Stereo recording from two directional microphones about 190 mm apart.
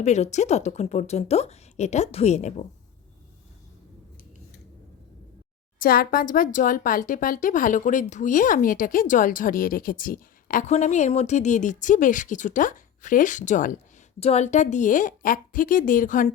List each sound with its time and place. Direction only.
0.0 s a woman's voice: 35° left (ahead or behind)
5.8 s speech: 50° left (ahead or behind)